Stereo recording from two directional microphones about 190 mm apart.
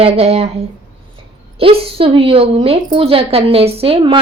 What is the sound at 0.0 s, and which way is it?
Speech, 30° right (ahead or behind).